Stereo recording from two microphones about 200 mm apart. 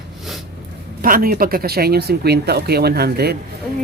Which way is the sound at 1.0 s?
45° right (ahead or behind).